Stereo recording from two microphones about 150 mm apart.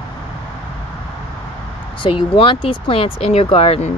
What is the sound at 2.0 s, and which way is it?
Speech, 35° left (ahead or behind).